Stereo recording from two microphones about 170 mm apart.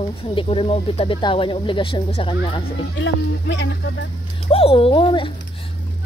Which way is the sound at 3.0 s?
90° left.